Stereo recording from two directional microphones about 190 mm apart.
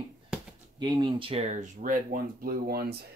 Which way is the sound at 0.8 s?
25° right (ahead or behind).